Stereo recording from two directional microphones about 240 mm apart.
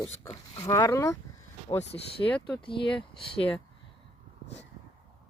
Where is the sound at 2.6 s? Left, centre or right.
Left.